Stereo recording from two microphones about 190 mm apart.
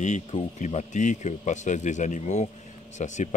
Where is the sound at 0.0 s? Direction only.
40° left (ahead or behind).